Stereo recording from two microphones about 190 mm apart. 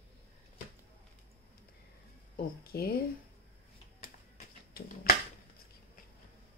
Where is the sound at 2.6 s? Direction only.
55° left (ahead or behind).